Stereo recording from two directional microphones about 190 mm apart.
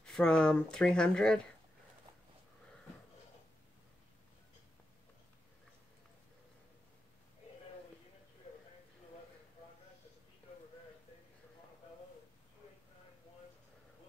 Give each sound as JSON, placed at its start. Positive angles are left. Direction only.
{"t": 0.0, "sound": "speech", "side_deg": 5}